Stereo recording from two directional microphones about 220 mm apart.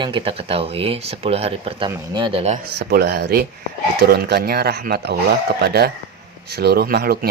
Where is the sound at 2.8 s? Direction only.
45° right (ahead or behind).